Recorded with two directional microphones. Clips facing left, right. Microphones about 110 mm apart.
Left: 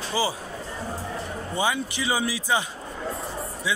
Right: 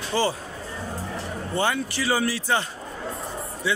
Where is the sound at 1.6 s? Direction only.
15° left (ahead or behind).